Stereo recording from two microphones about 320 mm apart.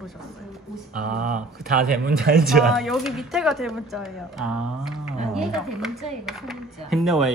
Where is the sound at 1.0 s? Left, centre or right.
Right.